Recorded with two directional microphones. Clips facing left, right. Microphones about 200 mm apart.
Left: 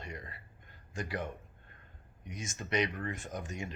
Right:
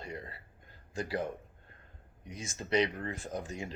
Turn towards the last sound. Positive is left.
turn(degrees=-30)  # may be behind; listen again after turning